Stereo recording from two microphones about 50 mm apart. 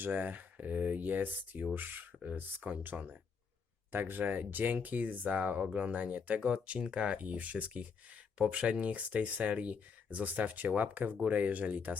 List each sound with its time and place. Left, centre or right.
0.0 s speech: right
2.9 s speech: right
3.9 s speech: right